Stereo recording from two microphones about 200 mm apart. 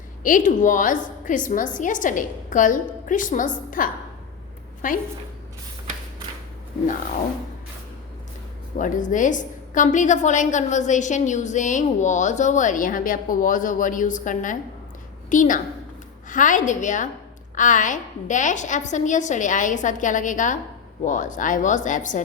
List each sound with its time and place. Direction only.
0.2 s a woman's voice: 40° left (ahead or behind)
8.8 s a woman's voice: 40° left (ahead or behind)